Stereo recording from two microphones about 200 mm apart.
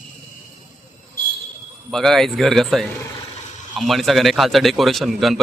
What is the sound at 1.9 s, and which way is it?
A man's voice, centre (ahead or behind).